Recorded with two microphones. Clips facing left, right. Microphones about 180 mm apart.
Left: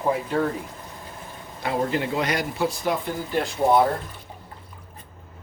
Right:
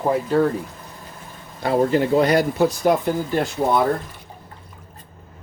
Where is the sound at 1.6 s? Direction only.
40° right (ahead or behind).